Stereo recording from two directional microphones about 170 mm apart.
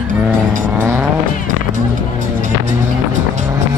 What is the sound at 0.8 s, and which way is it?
Vehicle, 10° right (ahead or behind).